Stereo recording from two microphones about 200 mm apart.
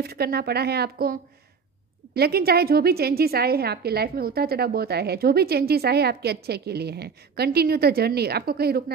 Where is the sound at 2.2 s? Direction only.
50° right (ahead or behind).